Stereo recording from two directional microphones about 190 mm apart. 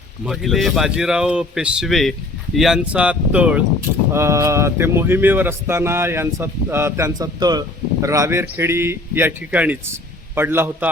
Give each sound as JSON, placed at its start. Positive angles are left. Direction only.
{"t": 0.3, "sound": "speech", "side_deg": 0}